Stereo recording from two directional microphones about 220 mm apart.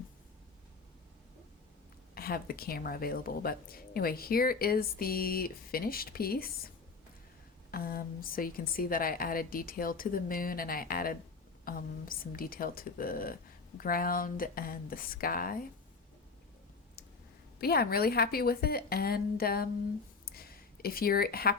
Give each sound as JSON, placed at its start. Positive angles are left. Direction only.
{"t": 2.1, "sound": "speech", "side_deg": 45}
{"t": 7.7, "sound": "speech", "side_deg": 40}
{"t": 17.6, "sound": "speech", "side_deg": 45}
{"t": 20.2, "sound": "a sound", "side_deg": 45}